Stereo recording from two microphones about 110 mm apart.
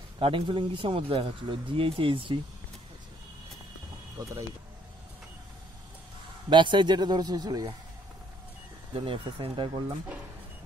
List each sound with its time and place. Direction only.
0.2 s a man's voice: 50° right (ahead or behind)
4.2 s speech: 25° right (ahead or behind)
6.5 s speech: 45° right (ahead or behind)
8.9 s a man's voice: 55° right (ahead or behind)